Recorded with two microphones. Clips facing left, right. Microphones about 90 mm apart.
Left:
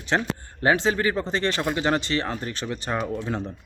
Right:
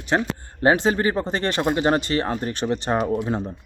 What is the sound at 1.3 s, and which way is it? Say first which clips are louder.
Speech: right 1 dB; 50° right (ahead or behind).